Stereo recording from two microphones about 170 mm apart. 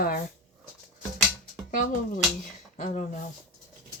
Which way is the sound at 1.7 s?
55° left (ahead or behind).